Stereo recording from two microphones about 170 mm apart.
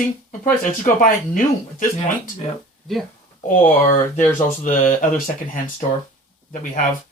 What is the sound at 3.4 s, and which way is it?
Speech, 45° left (ahead or behind).